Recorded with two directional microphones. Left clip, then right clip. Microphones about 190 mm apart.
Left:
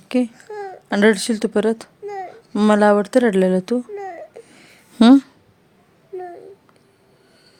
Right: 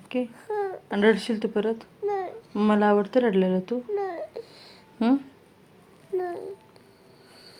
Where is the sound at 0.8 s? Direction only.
70° left (ahead or behind).